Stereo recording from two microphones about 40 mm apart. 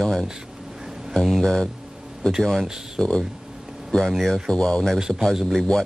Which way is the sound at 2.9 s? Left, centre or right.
Left.